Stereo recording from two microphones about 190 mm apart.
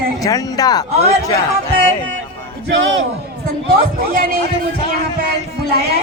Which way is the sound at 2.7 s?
90° right.